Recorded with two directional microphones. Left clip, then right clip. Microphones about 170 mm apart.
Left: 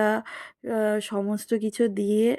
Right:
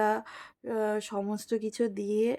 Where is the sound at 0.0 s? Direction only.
20° left (ahead or behind).